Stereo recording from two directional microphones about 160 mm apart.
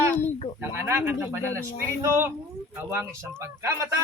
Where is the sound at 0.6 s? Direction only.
15° right (ahead or behind).